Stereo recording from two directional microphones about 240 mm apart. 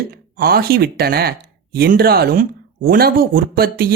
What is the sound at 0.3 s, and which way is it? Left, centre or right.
Speech, right.